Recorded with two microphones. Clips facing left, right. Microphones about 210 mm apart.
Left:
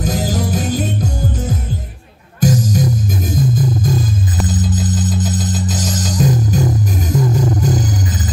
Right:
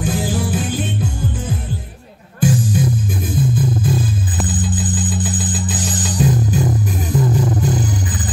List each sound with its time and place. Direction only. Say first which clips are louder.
0.0 s music: left 1 dB; 40° left (ahead or behind)
7.6 s music: left 2 dB; 40° left (ahead or behind)